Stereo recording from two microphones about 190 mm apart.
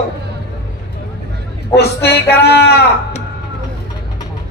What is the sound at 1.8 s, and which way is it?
Speech, 60° left (ahead or behind).